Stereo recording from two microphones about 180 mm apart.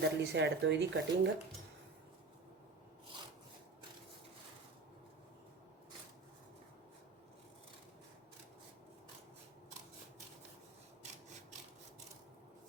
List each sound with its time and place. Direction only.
0.0 s speech: 75° right (ahead or behind)